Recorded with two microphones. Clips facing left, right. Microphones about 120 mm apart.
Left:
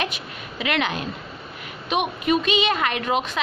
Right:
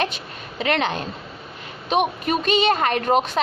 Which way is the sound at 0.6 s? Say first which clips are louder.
Right 2 dB; 35° right (ahead or behind).